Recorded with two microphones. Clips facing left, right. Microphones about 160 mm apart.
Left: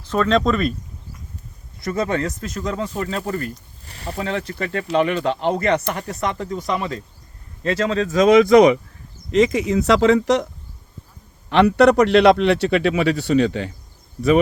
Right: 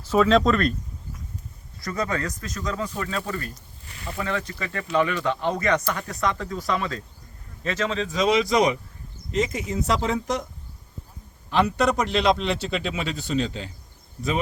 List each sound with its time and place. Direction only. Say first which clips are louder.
0.0 s speech: even; 5° right (ahead or behind)
1.8 s speech: left 5 dB; 25° left (ahead or behind)
7.6 s speech: left 6 dB; 35° left (ahead or behind); by 8.8 s 60° left (ahead or behind)
9.3 s speech: left 9 dB; 80° left
11.4 s a man's voice: left 8 dB; 65° left (ahead or behind)